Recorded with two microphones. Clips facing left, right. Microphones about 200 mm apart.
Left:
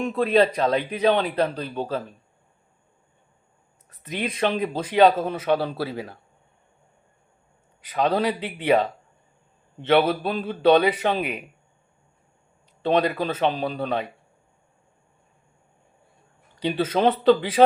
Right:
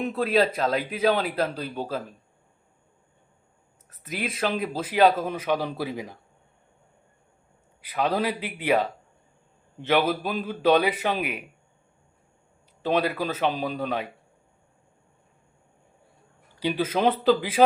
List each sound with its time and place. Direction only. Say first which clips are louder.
0.0 s speech: left 3 dB; 5° right (ahead or behind)
3.8 s speech: left 3 dB; 5° right (ahead or behind)
7.8 s speech: left 3 dB; 10° right (ahead or behind)
10.1 s speech: left 2 dB; 10° right (ahead or behind)
12.8 s speech: left 3 dB; 10° right (ahead or behind)
16.6 s speech: left 2 dB; 10° right (ahead or behind)